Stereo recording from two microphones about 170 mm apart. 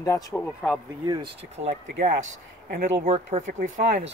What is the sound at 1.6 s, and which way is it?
Speech, 40° right (ahead or behind).